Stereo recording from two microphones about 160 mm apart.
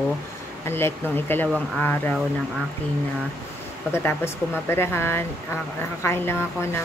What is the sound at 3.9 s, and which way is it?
Speech, 15° left (ahead or behind).